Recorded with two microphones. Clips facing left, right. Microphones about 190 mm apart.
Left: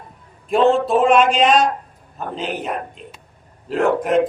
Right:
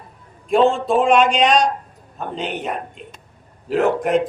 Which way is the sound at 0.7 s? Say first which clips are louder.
Left 2 dB; centre (ahead or behind).